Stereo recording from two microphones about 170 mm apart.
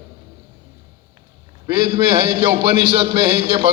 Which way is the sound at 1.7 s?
35° right (ahead or behind).